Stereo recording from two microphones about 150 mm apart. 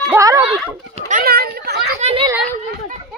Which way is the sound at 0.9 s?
55° right (ahead or behind).